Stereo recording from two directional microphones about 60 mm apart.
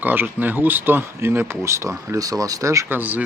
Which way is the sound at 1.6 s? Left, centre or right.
Right.